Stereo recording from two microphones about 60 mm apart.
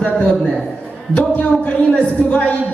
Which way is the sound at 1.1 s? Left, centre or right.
Left.